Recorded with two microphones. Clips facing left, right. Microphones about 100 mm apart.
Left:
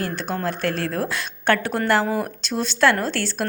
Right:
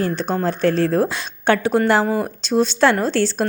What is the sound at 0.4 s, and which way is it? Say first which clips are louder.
A woman's voice: right 8 dB; 25° right (ahead or behind).